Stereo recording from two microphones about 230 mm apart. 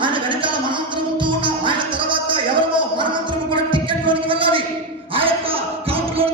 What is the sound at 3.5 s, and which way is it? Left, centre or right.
Music, right.